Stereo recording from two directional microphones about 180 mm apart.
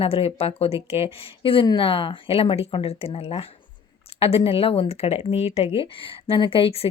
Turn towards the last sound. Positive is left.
turn(degrees=30)  # may be behind; listen again after turning